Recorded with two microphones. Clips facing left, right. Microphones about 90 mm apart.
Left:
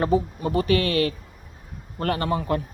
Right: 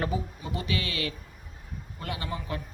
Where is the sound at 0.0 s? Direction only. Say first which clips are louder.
Left 9 dB; 45° left (ahead or behind).